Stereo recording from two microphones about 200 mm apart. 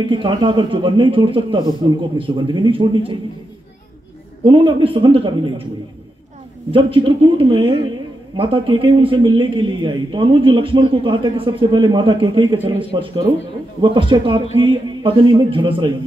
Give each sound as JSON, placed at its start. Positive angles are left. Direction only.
{"t": 0.0, "sound": "a man's voice", "side_deg": -25}
{"t": 4.5, "sound": "a man's voice", "side_deg": -25}
{"t": 6.7, "sound": "a man's voice", "side_deg": -25}